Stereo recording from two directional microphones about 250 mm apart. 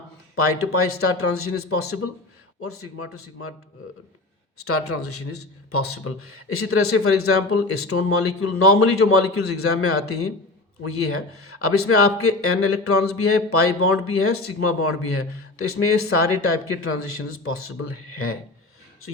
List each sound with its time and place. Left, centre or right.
0.3 s speech: left
4.5 s speech: left
16.8 s speech: left